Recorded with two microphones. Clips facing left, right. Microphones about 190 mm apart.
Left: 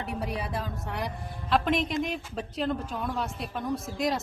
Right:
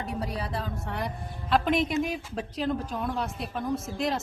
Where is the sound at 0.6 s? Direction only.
Centre (ahead or behind).